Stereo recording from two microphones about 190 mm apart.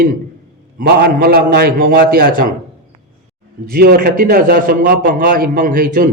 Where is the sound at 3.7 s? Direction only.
50° right (ahead or behind).